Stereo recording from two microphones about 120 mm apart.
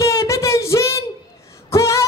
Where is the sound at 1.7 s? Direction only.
25° left (ahead or behind).